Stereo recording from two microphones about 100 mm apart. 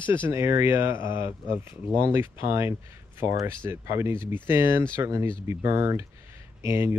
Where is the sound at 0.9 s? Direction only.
55° left (ahead or behind).